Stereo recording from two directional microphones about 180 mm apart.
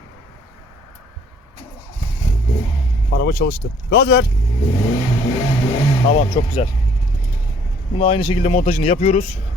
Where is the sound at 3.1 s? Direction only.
60° left (ahead or behind).